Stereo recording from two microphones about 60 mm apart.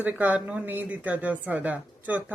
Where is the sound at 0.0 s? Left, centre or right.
Right.